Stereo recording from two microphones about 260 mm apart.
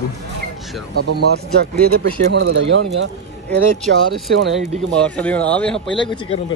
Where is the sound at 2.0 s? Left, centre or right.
Right.